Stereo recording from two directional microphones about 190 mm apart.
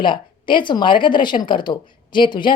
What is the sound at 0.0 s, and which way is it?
A woman's voice, 25° left (ahead or behind).